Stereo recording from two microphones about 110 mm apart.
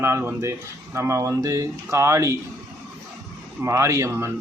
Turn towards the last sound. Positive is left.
turn(degrees=-25)  # may be behind; listen again after turning